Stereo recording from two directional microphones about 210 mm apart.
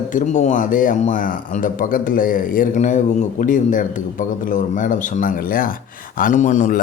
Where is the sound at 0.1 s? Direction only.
35° left (ahead or behind).